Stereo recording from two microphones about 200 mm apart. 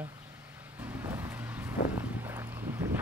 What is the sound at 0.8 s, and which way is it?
Vehicle, 10° right (ahead or behind).